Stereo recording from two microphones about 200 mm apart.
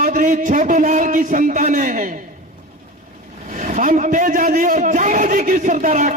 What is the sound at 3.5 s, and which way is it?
A man's voice, 35° right (ahead or behind).